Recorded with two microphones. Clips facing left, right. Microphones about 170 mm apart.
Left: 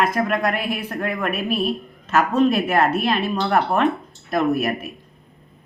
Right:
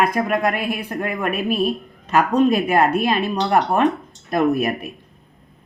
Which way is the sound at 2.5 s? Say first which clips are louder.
Right 2 dB; 15° right (ahead or behind).